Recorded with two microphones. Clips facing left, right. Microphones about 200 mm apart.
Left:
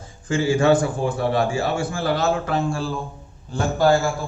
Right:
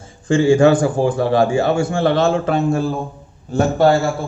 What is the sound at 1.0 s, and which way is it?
Speech, 90° right.